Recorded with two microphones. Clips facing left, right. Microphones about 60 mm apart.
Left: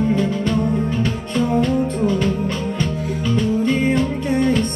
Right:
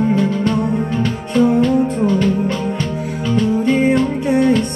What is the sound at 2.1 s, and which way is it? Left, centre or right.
Music, centre.